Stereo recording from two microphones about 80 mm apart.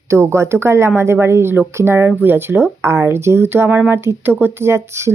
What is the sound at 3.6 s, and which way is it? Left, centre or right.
Speech, centre.